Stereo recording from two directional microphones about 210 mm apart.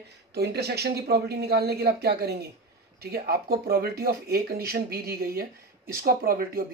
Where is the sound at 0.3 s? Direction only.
50° right (ahead or behind).